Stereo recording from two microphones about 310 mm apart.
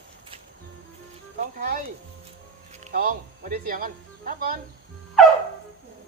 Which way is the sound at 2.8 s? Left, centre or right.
Right.